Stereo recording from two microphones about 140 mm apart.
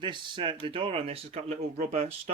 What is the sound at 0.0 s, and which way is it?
Speech, 35° right (ahead or behind).